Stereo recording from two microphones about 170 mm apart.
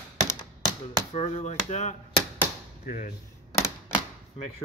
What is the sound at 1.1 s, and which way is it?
Speech, 40° left (ahead or behind).